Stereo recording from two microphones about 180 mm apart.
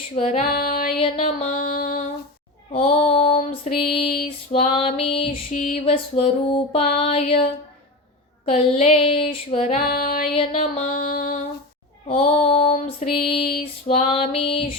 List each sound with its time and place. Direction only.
0.2 s female singing: 35° left (ahead or behind)
0.4 s female singing: 55° left (ahead or behind)
0.9 s music: 35° left (ahead or behind)
2.7 s female singing: 35° left (ahead or behind)
5.3 s female singing: 45° left (ahead or behind)
5.8 s female singing: 35° left (ahead or behind)
8.4 s female singing: 35° left (ahead or behind)
9.8 s female singing: 55° left (ahead or behind)
10.3 s female singing: 35° left (ahead or behind)
10.9 s a sound: 50° left (ahead or behind)
12.1 s female singing: 35° left (ahead or behind)